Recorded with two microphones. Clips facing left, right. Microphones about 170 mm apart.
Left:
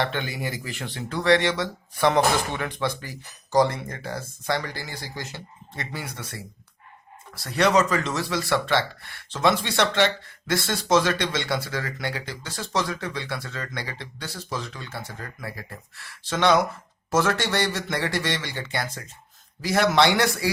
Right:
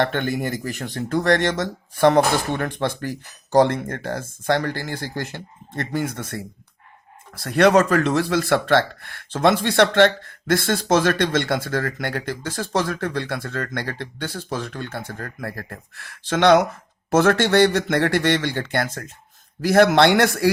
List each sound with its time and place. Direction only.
0.0 s speech: 50° right (ahead or behind)